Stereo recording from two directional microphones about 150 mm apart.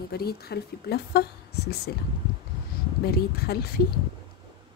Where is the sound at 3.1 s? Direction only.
90° left.